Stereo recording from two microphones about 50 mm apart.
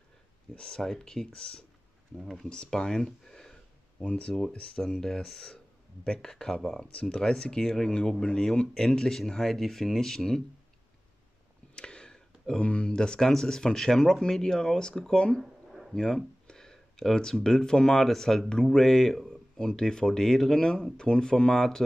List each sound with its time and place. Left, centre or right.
0.6 s speech: centre
2.2 s speech: centre
2.5 s speech: centre
4.0 s speech: left
4.7 s speech: centre
11.7 s speech: centre
15.4 s a sound: centre
15.9 s speech: centre